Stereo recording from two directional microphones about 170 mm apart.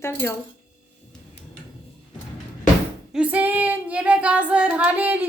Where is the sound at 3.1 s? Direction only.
10° right (ahead or behind).